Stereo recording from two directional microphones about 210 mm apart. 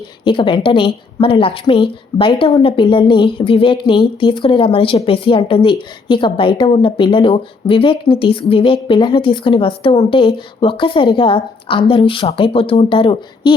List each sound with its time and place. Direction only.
0.3 s a woman's voice: 25° left (ahead or behind)